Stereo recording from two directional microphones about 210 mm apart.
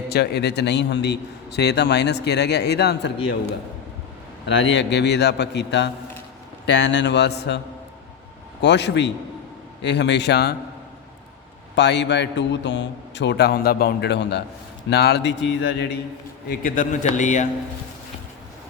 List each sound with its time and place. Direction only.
0.1 s a man's voice: 50° left (ahead or behind)
8.6 s a man's voice: 55° left (ahead or behind)
11.7 s a man's voice: 55° left (ahead or behind)
16.5 s a man's voice: 40° left (ahead or behind)